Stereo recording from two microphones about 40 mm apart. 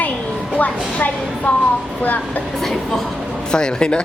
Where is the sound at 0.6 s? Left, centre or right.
Left.